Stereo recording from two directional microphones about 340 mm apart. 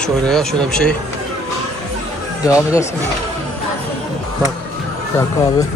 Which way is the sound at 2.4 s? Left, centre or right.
Centre.